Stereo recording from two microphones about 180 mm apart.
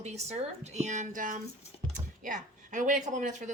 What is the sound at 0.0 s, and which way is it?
A woman's voice, 35° right (ahead or behind).